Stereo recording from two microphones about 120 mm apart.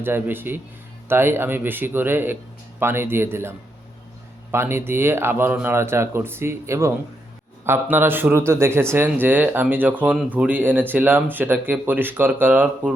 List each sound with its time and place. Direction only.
0.0 s speech: 15° right (ahead or behind)
4.5 s speech: 20° right (ahead or behind)